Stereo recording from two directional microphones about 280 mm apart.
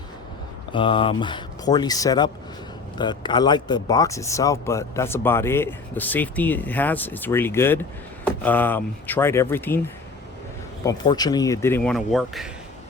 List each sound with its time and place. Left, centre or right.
0.7 s speech: centre
10.8 s speech: centre